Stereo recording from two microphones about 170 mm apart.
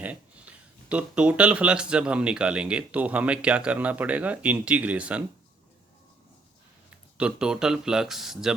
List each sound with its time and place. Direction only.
0.0 s speech: 10° right (ahead or behind)
7.2 s speech: 5° right (ahead or behind)